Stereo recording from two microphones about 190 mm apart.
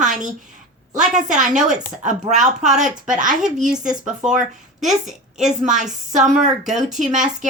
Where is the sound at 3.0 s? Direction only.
40° right (ahead or behind).